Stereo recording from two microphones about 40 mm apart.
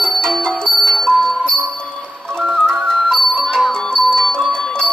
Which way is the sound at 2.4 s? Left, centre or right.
Centre.